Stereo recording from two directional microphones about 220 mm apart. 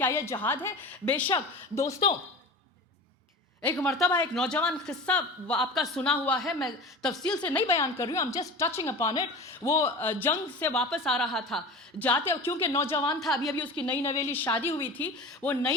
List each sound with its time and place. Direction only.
0.0 s a woman's voice: 10° left (ahead or behind)
3.6 s a woman's voice: 5° left (ahead or behind)
13.2 s a woman's voice: centre (ahead or behind)